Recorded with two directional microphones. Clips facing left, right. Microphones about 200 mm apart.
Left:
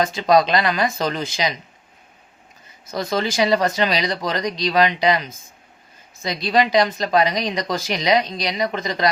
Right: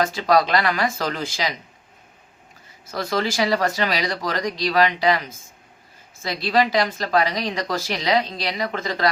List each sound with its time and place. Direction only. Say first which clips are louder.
0.0 s speech: left 2 dB; 20° left (ahead or behind)
2.8 s speech: left 1 dB; 20° left (ahead or behind)